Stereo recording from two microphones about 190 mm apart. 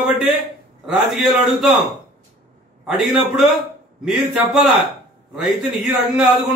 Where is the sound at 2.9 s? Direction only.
Centre (ahead or behind).